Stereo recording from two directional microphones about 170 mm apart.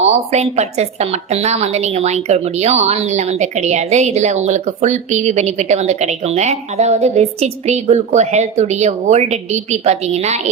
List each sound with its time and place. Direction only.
0.0 s a woman's voice: 40° right (ahead or behind)